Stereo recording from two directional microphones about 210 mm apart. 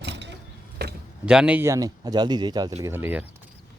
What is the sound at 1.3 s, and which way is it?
Speech, 5° right (ahead or behind).